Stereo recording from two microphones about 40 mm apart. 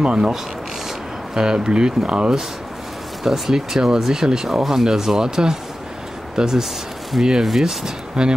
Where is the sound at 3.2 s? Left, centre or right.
Centre.